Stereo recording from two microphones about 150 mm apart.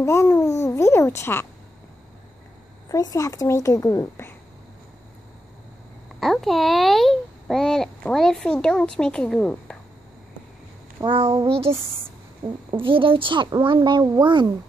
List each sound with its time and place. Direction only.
0.0 s a child's voice: 20° left (ahead or behind)
2.9 s a child's voice: 25° left (ahead or behind)
6.1 s a child's voice: centre (ahead or behind)
11.0 s a child's voice: 35° right (ahead or behind)
12.4 s a child's voice: 30° right (ahead or behind)